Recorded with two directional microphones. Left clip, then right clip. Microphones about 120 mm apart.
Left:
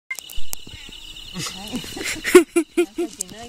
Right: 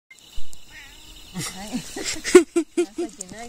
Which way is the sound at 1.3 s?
60° right (ahead or behind).